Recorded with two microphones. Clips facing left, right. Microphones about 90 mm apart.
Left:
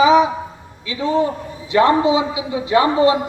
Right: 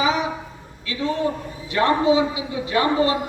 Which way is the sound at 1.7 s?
20° left (ahead or behind).